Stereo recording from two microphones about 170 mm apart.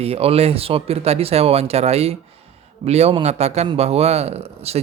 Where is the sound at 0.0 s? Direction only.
35° right (ahead or behind).